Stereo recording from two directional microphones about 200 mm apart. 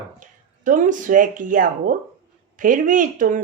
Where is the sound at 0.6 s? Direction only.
40° right (ahead or behind).